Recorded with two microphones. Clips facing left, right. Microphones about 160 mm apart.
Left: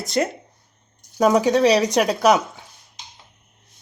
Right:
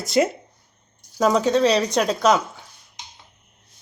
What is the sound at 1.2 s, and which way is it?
Speech, 10° left (ahead or behind).